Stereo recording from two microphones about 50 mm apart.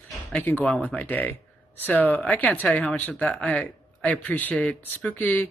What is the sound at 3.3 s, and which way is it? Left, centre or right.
Speech, centre.